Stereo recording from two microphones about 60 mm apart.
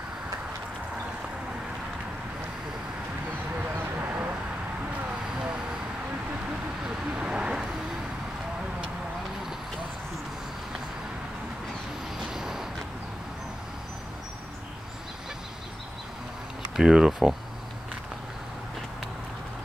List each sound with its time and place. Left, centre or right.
3.7 s a sound: right
6.8 s vehicle: centre
12.3 s vehicle: centre
16.7 s speech: centre